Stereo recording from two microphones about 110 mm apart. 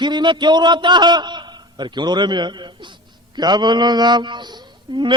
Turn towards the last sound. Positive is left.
turn(degrees=-45)  # may be behind; listen again after turning